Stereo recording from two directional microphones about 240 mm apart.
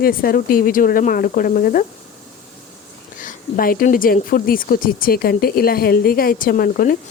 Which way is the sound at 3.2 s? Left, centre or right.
Left.